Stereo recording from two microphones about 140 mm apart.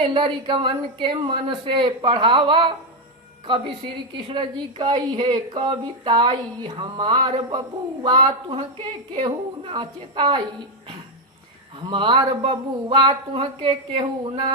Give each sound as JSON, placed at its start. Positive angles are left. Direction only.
{"t": 0.0, "sound": "a woman's voice", "side_deg": -35}
{"t": 11.9, "sound": "a woman's voice", "side_deg": -35}